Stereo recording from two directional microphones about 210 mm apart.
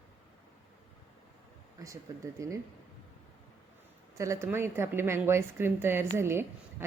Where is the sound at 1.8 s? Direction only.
15° right (ahead or behind).